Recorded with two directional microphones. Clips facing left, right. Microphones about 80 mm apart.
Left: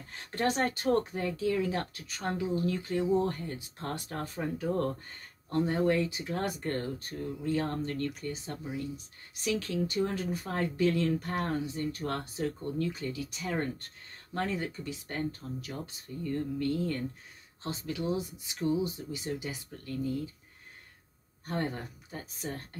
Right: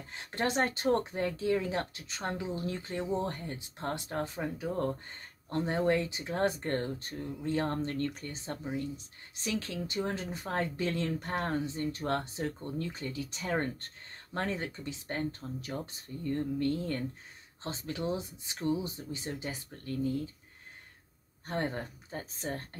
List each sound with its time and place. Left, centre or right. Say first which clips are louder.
0.1 s speech: left 1 dB; right
21.5 s speech: even; right